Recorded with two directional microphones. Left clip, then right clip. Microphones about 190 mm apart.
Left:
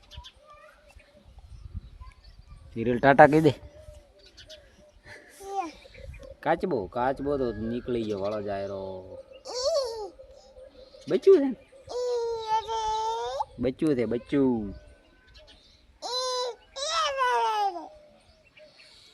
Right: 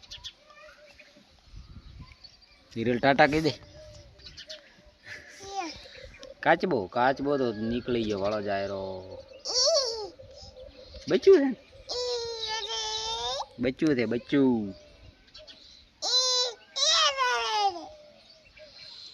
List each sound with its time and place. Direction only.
3.0 s speech: 45° left (ahead or behind)
5.0 s children playing: 30° left (ahead or behind)
5.5 s a sound: 85° left
6.4 s speech: 5° left (ahead or behind)
9.5 s a sound: 35° left (ahead or behind)
11.3 s speech: 15° left (ahead or behind)
11.9 s babbling: 55° left (ahead or behind)
12.9 s a sound: 60° left (ahead or behind)
13.6 s speech: 15° left (ahead or behind)
16.0 s babbling: 45° left (ahead or behind)